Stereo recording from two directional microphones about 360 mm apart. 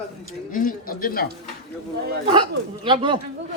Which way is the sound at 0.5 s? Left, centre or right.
Left.